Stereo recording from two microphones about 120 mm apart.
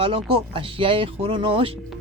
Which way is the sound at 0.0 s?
50° right (ahead or behind).